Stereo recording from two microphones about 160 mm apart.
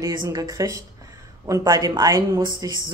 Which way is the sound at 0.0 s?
25° right (ahead or behind).